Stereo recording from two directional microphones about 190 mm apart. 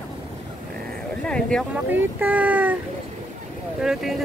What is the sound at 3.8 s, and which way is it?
Speech, centre (ahead or behind).